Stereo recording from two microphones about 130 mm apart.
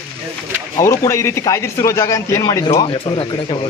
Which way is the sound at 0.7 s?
20° left (ahead or behind).